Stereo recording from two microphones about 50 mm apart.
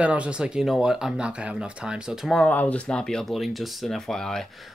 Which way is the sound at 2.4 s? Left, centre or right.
Left.